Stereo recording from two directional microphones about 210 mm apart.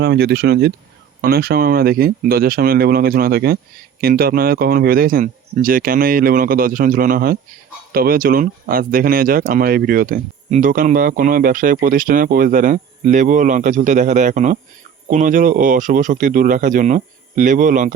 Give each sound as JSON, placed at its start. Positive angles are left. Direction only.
{"t": 0.0, "sound": "speech", "side_deg": -50}